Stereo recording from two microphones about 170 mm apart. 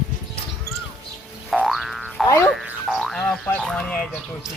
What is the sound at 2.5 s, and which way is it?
Frog, centre (ahead or behind).